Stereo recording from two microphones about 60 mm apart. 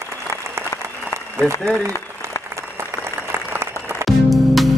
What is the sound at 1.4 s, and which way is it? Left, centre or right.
Speech, centre.